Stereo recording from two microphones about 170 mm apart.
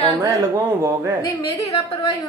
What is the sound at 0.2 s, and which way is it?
Speech, 15° right (ahead or behind).